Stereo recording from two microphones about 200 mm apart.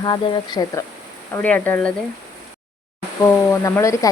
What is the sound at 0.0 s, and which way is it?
Speech, 20° left (ahead or behind).